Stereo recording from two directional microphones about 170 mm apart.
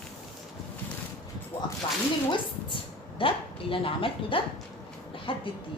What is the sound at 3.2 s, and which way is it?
Speech, 30° left (ahead or behind).